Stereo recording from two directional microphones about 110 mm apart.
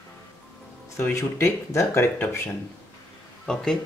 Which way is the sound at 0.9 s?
25° left (ahead or behind).